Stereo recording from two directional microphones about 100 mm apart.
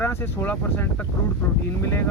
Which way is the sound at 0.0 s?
25° left (ahead or behind).